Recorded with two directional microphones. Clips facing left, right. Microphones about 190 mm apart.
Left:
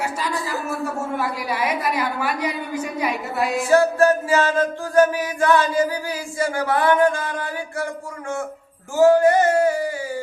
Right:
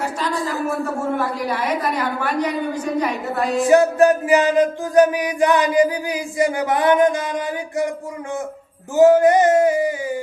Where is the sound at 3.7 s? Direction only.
20° right (ahead or behind).